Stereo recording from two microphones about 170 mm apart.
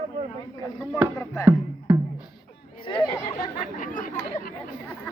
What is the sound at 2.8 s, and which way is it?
Chatter, 30° left (ahead or behind).